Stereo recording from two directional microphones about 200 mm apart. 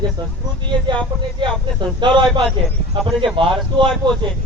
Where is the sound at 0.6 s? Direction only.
25° right (ahead or behind).